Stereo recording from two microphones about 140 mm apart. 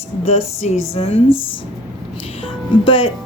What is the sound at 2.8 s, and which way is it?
Speech, 40° left (ahead or behind).